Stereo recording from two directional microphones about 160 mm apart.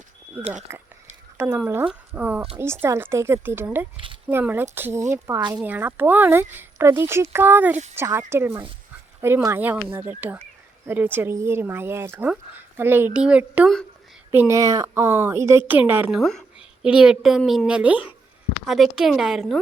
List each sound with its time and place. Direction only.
0.7 s a woman's voice: 15° right (ahead or behind)
14.3 s speech: 15° right (ahead or behind)
16.2 s a woman's voice: centre (ahead or behind)